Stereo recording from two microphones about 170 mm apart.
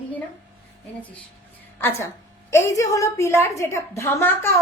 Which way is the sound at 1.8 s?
15° left (ahead or behind).